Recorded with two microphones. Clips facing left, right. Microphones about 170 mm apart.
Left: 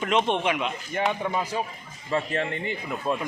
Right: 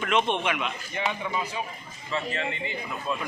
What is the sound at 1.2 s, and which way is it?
A man's voice, 45° left (ahead or behind).